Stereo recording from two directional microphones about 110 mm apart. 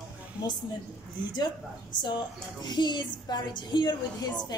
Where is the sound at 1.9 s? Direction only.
40° left (ahead or behind).